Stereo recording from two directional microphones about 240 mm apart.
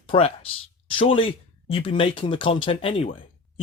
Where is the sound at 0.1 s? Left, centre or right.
Left.